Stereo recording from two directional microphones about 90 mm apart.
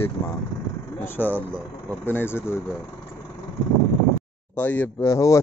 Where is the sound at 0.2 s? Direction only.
40° left (ahead or behind).